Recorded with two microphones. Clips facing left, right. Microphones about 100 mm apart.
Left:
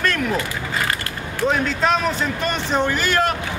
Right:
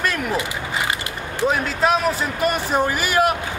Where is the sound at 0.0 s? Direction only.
5° right (ahead or behind).